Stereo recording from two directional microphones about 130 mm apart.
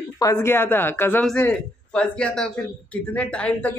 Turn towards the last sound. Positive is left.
turn(degrees=10)  # may be behind; listen again after turning